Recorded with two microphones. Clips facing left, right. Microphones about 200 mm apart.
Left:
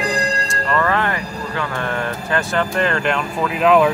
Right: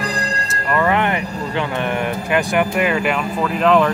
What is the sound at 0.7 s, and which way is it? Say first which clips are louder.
Speech: right 2 dB; 15° right (ahead or behind).